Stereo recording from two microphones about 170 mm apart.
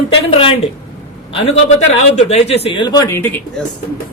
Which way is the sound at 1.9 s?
40° left (ahead or behind).